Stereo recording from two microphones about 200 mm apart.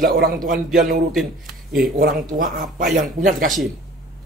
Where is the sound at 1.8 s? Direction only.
45° right (ahead or behind).